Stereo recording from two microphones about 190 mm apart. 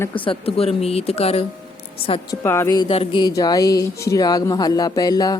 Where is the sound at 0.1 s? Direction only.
30° left (ahead or behind).